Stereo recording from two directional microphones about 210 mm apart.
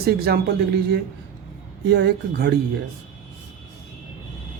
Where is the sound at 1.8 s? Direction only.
55° right (ahead or behind).